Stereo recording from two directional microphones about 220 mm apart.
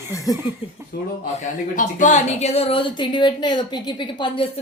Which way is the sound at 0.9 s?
45° left (ahead or behind).